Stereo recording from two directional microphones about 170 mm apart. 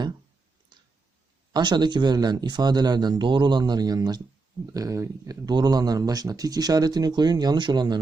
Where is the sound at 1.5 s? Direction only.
25° right (ahead or behind).